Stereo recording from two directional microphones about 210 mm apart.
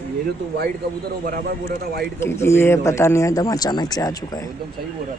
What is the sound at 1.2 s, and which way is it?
Speech, 45° right (ahead or behind).